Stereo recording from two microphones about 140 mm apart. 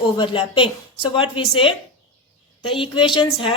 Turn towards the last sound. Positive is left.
turn(degrees=35)  # may be behind; listen again after turning